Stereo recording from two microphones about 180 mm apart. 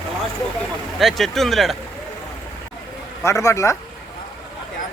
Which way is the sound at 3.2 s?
15° left (ahead or behind).